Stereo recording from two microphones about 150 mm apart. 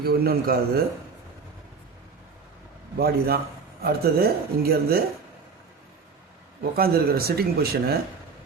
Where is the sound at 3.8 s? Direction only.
90° right.